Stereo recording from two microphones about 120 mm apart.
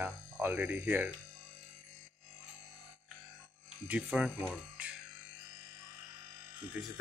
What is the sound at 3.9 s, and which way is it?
Speech, 5° right (ahead or behind).